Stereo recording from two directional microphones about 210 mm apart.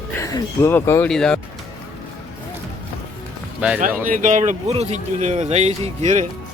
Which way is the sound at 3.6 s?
5° right (ahead or behind).